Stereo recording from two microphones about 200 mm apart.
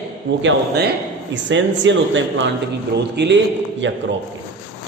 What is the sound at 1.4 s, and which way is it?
A man's voice, 65° right (ahead or behind).